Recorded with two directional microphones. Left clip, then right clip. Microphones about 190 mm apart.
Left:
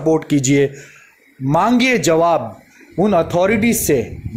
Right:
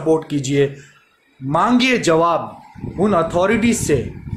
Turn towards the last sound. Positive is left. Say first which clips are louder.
# left 1 dB
turn(degrees=35)  # may be behind; listen again after turning